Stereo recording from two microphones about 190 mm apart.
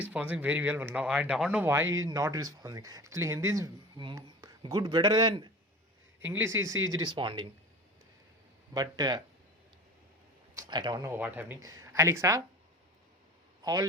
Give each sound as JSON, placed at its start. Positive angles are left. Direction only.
{"t": 0.0, "sound": "speech", "side_deg": -5}
{"t": 8.7, "sound": "speech", "side_deg": -20}
{"t": 10.5, "sound": "speech", "side_deg": -20}
{"t": 13.6, "sound": "a man's voice", "side_deg": -20}